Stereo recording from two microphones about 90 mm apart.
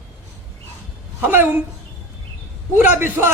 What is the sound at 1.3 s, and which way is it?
Speech, 20° right (ahead or behind).